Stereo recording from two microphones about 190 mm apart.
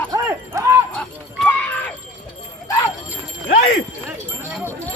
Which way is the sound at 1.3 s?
5° left (ahead or behind).